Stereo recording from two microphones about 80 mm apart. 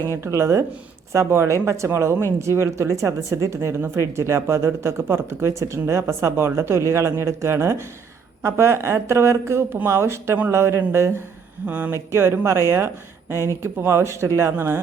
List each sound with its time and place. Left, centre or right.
0.2 s speech: right
11.6 s speech: right
13.6 s speech: right